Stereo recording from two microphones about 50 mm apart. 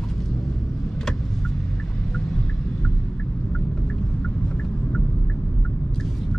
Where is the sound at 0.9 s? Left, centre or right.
Centre.